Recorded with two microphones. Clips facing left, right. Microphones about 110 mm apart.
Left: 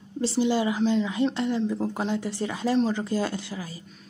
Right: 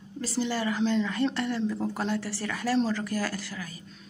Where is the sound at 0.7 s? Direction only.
5° left (ahead or behind).